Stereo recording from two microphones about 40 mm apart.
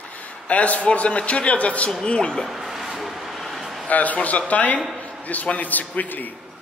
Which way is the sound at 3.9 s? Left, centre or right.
Left.